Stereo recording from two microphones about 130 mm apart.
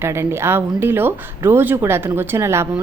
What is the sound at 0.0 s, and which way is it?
Speech, 20° right (ahead or behind).